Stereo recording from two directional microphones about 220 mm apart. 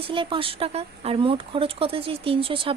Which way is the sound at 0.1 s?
25° right (ahead or behind).